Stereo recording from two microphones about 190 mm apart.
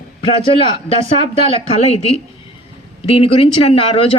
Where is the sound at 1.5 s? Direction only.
35° left (ahead or behind).